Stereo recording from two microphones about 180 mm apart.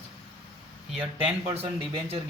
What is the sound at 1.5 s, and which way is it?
Speech, 35° right (ahead or behind).